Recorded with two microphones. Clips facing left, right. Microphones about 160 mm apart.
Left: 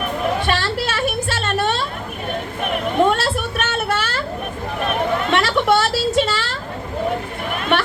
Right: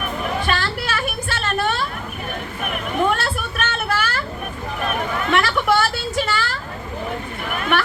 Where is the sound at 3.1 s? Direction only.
25° left (ahead or behind).